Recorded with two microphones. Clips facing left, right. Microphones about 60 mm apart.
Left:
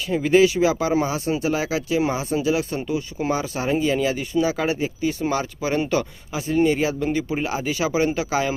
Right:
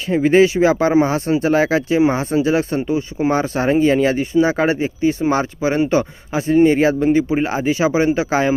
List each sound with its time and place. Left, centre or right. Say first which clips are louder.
0.1 s speech: right 4 dB; right